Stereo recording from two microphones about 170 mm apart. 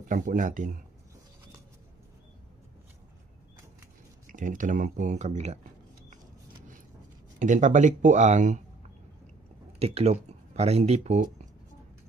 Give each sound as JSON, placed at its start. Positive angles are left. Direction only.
{"t": 0.1, "sound": "speech", "side_deg": -50}
{"t": 4.3, "sound": "speech", "side_deg": -50}
{"t": 7.3, "sound": "speech", "side_deg": -50}
{"t": 9.8, "sound": "speech", "side_deg": -40}